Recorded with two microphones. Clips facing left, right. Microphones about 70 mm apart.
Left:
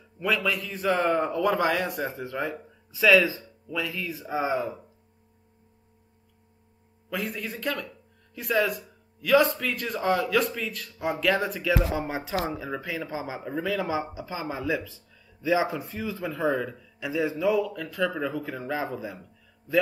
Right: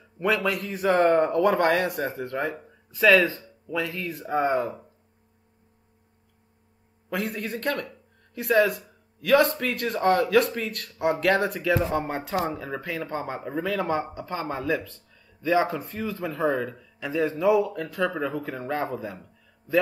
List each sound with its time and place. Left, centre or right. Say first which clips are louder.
0.3 s speech: right 2 dB; right
2.3 s speech: right 2 dB; centre
2.9 s speech: right 1 dB; centre
3.7 s speech: right 2 dB; right
4.4 s speech: right 3 dB; centre
7.2 s a man's voice: right 3 dB; right
9.3 s a man's voice: right 1 dB; right
11.6 s a man's voice: right 2 dB; centre
17.6 s speech: right 3 dB; right
18.0 s speech: right 1 dB; centre